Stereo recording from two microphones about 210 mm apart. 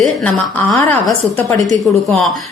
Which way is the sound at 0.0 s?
5° left (ahead or behind).